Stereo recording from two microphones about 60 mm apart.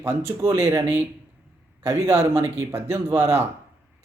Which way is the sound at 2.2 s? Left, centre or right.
Right.